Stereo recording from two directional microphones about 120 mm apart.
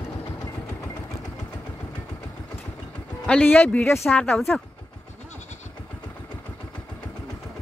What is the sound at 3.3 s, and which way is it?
Speech, 10° left (ahead or behind).